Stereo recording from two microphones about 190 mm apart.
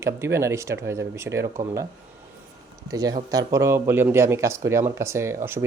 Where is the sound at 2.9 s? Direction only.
20° right (ahead or behind).